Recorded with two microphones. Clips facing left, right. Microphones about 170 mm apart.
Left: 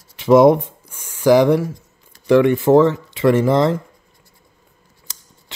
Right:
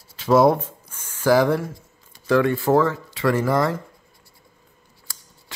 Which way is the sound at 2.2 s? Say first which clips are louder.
Left 6 dB; 20° left (ahead or behind).